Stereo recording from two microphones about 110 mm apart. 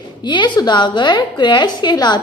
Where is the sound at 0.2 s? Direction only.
45° left (ahead or behind).